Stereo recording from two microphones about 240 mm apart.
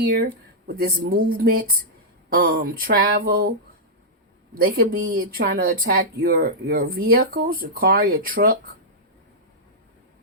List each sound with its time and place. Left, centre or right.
0.0 s speech: right
4.5 s speech: right